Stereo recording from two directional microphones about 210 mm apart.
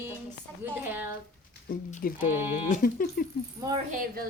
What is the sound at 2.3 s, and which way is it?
Speech, 10° right (ahead or behind).